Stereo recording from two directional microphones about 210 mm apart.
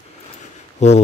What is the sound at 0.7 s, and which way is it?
Speech, 30° left (ahead or behind).